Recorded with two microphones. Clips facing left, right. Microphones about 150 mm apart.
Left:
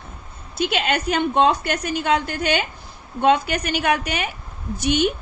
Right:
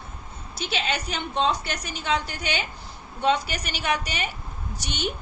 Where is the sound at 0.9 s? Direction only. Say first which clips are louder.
Left 8 dB; 55° left (ahead or behind).